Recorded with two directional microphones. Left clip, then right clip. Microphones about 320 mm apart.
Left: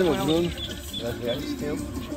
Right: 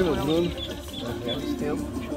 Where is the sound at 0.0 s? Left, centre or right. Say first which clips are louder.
Left 1 dB; centre.